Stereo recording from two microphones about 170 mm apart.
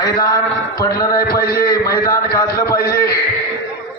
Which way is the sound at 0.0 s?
20° left (ahead or behind).